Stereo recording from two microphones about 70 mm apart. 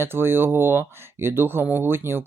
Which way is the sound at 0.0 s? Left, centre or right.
Right.